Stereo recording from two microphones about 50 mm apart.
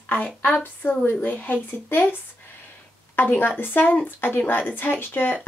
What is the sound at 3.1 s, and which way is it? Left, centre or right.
Speech, left.